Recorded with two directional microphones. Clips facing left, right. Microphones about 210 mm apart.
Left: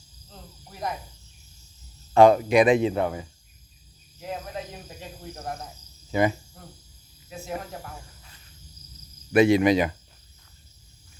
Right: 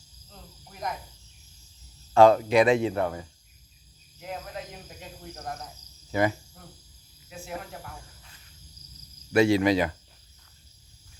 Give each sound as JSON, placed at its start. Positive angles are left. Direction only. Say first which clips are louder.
{"t": 0.3, "sound": "cricket", "louder": "left 3 dB", "side_deg": 30}
{"t": 2.1, "sound": "speech", "louder": "left 2 dB", "side_deg": 15}
{"t": 4.2, "sound": "cricket", "louder": "left 3 dB", "side_deg": 30}
{"t": 7.3, "sound": "a sound", "louder": "left 4 dB", "side_deg": 40}
{"t": 9.3, "sound": "speech", "louder": "left 3 dB", "side_deg": 20}